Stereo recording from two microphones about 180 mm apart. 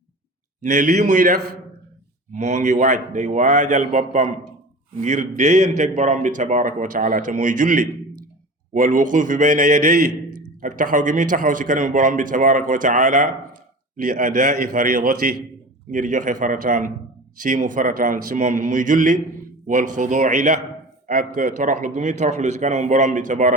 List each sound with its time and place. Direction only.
0.6 s a man's voice: 45° right (ahead or behind)
2.3 s a man's voice: 40° right (ahead or behind)